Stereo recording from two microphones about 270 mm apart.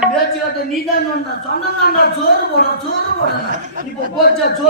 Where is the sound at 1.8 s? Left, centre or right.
Left.